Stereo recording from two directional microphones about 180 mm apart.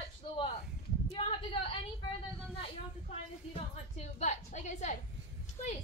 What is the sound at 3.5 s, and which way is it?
A woman's voice, 35° left (ahead or behind).